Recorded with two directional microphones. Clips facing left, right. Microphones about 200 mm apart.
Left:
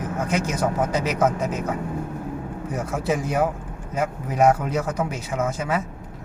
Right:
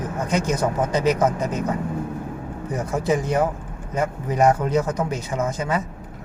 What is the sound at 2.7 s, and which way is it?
A man's voice, 5° left (ahead or behind).